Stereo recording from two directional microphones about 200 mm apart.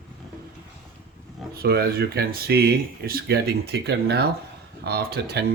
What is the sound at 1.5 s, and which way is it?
Speech, 50° right (ahead or behind).